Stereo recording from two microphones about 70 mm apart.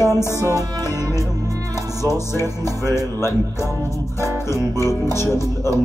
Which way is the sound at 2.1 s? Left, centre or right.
Left.